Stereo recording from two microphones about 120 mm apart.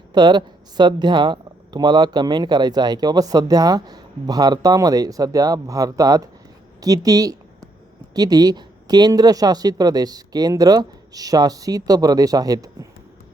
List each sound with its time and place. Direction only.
0.1 s speech: 40° right (ahead or behind)